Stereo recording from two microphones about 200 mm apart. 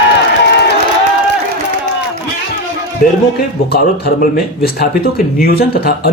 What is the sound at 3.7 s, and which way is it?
Speech, 50° left (ahead or behind).